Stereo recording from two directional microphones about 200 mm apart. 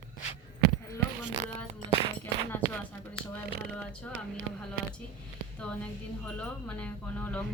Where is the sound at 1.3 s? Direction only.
30° right (ahead or behind).